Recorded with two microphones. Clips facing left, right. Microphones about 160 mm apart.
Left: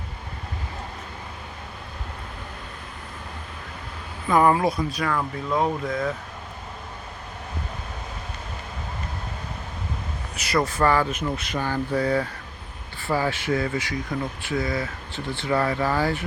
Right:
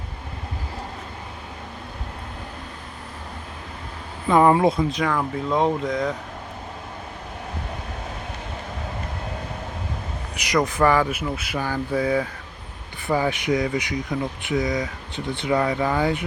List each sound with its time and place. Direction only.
4.3 s speech: 25° right (ahead or behind)
10.3 s speech: 15° right (ahead or behind)